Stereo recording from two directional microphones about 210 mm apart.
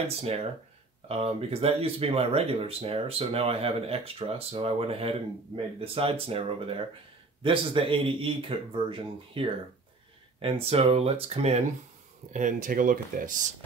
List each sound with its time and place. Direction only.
0.2 s speech: 30° right (ahead or behind)